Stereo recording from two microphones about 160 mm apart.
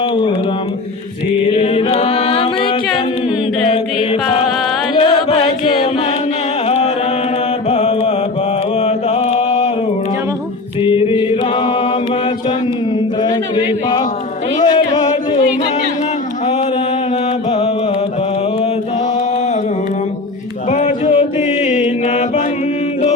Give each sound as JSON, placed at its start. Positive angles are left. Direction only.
{"t": 1.5, "sound": "chant", "side_deg": 35}
{"t": 4.1, "sound": "music", "side_deg": 35}
{"t": 6.7, "sound": "music", "side_deg": 40}
{"t": 7.7, "sound": "mantra", "side_deg": 35}
{"t": 8.8, "sound": "chant", "side_deg": 40}
{"t": 10.8, "sound": "mantra", "side_deg": 30}
{"t": 14.6, "sound": "music", "side_deg": 25}
{"t": 20.7, "sound": "music", "side_deg": 50}